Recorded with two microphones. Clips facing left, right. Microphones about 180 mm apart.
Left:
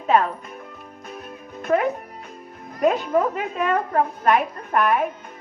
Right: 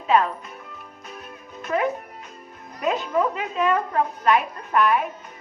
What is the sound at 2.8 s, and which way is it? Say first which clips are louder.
A woman's voice: left 3 dB; 55° left (ahead or behind).